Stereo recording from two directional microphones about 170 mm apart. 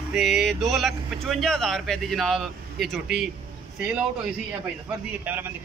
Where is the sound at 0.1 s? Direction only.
Centre (ahead or behind).